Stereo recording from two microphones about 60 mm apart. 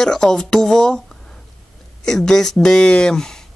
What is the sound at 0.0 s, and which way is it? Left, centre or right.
Speech, centre.